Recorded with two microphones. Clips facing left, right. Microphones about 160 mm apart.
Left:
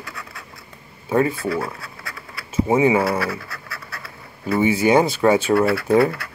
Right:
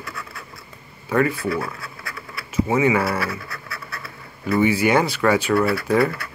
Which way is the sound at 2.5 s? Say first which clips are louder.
Left 2 dB; 25° left (ahead or behind).